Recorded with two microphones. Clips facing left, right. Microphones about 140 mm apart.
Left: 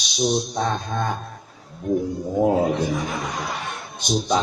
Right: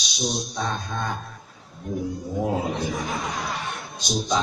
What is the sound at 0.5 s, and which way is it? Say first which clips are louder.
Speech: left 4 dB; 50° left (ahead or behind).